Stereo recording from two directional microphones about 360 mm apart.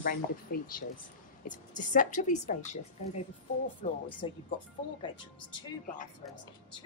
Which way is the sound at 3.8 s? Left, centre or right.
Centre.